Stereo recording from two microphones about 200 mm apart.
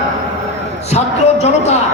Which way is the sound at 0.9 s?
35° left (ahead or behind).